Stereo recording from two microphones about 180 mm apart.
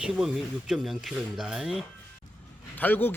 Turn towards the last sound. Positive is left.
turn(degrees=10)  # may be behind; listen again after turning